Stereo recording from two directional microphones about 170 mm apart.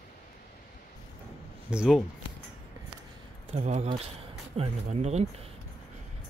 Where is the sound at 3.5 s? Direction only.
40° right (ahead or behind).